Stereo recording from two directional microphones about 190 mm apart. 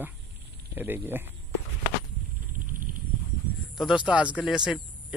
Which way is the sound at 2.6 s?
45° right (ahead or behind).